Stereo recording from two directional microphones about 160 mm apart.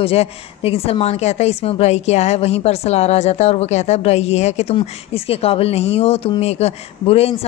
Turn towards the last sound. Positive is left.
turn(degrees=40)  # may be behind; listen again after turning